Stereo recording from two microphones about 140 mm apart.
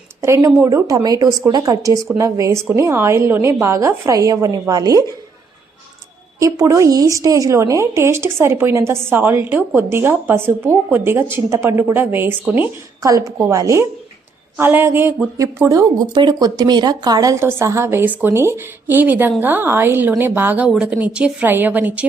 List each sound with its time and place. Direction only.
0.2 s a woman's voice: 20° right (ahead or behind)
6.4 s a woman's voice: 25° right (ahead or behind)
13.0 s a woman's voice: 25° right (ahead or behind)